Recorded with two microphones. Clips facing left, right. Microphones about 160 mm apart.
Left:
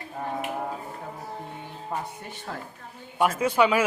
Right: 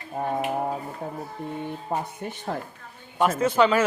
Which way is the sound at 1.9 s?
30° right (ahead or behind).